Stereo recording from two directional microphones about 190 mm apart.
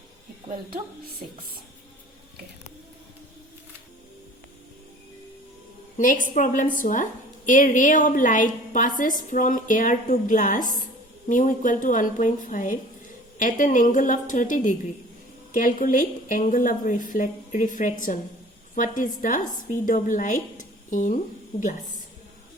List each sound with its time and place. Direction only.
6.0 s a woman's voice: 45° left (ahead or behind)